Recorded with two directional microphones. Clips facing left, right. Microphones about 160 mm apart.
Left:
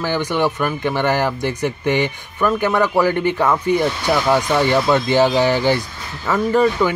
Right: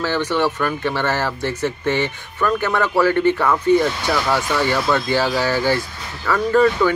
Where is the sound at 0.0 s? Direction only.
15° left (ahead or behind).